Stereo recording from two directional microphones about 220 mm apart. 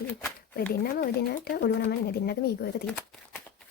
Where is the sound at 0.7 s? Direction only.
45° left (ahead or behind).